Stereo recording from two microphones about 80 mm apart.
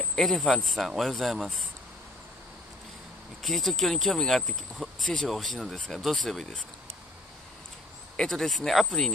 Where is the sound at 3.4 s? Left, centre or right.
Centre.